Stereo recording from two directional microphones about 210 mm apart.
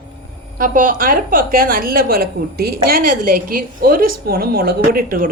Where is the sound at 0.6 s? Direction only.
40° right (ahead or behind).